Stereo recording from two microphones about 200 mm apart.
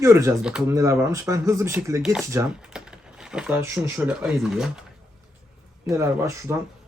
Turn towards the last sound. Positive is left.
turn(degrees=-15)  # may be behind; listen again after turning